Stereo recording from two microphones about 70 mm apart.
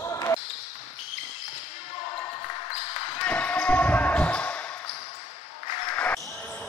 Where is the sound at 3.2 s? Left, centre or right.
Centre.